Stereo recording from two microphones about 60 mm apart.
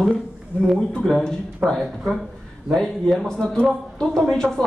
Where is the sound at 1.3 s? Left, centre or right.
Centre.